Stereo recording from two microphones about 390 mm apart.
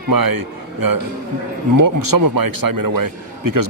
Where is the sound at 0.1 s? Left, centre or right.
Right.